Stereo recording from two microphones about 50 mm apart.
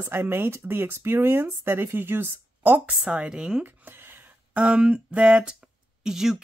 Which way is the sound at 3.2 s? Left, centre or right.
Centre.